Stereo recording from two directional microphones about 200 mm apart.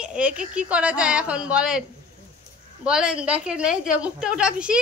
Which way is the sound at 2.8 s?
5° right (ahead or behind).